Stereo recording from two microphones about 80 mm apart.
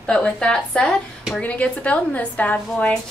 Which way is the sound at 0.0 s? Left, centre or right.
Centre.